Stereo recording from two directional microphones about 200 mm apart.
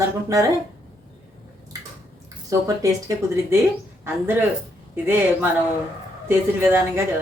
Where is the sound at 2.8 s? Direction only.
15° right (ahead or behind).